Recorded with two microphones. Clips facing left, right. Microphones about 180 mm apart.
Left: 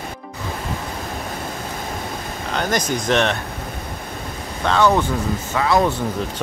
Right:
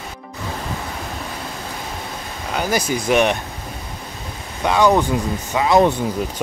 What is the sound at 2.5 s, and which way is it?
Speech, 10° right (ahead or behind).